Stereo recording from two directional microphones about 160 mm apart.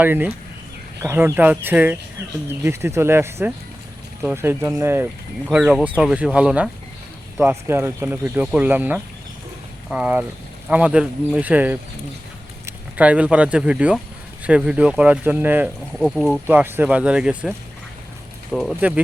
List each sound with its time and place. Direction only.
0.0 s speech: 10° right (ahead or behind)
15.9 s speech: centre (ahead or behind)
16.5 s speech: 10° right (ahead or behind)
18.5 s speech: centre (ahead or behind)